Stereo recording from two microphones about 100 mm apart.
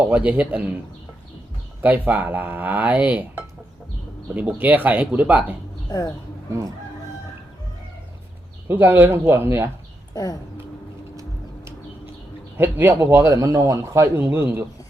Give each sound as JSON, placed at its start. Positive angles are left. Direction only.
{"t": 0.1, "sound": "speech", "side_deg": -15}
{"t": 1.8, "sound": "speech", "side_deg": -15}
{"t": 5.9, "sound": "speech", "side_deg": 35}
{"t": 8.6, "sound": "speech", "side_deg": -20}
{"t": 12.5, "sound": "speech", "side_deg": -20}
{"t": 14.2, "sound": "speech", "side_deg": -15}